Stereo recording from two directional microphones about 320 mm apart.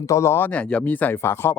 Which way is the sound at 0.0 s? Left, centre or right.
Centre.